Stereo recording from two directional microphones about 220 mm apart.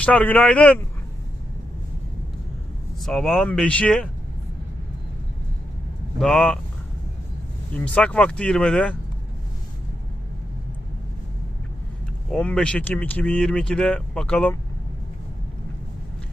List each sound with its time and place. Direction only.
0.0 s speech: 5° left (ahead or behind)
3.0 s speech: centre (ahead or behind)
6.1 s speech: centre (ahead or behind)
7.7 s speech: 5° left (ahead or behind)
12.3 s speech: 5° left (ahead or behind)